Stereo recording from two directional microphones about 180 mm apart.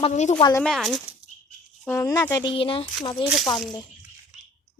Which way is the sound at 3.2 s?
Centre (ahead or behind).